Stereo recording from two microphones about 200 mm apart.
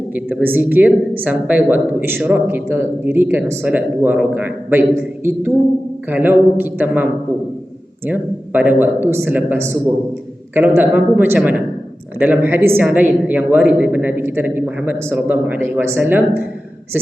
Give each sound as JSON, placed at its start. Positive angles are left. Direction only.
{"t": 0.1, "sound": "speech", "side_deg": -5}